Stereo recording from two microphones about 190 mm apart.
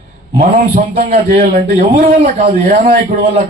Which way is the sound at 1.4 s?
50° right (ahead or behind).